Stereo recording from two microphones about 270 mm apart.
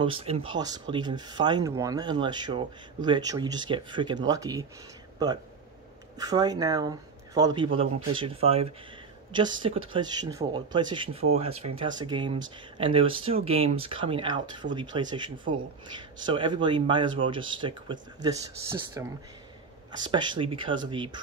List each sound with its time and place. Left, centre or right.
0.0 s speech: right
6.1 s speech: centre